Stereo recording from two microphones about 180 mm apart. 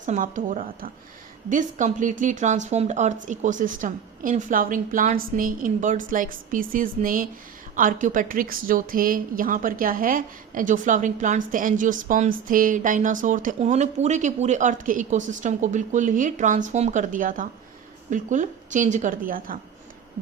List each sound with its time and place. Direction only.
0.0 s speech: 45° right (ahead or behind)